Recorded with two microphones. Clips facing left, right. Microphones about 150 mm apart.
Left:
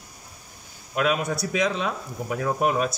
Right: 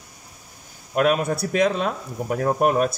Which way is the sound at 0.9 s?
50° right (ahead or behind).